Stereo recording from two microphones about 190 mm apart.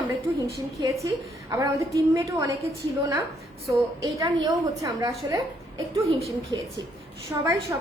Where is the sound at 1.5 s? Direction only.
15° right (ahead or behind).